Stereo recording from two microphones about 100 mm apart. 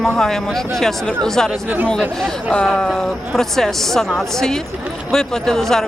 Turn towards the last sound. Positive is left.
turn(degrees=5)  # may be behind; listen again after turning